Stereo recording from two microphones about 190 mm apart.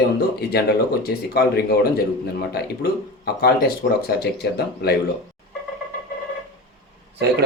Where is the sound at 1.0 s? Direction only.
55° left (ahead or behind).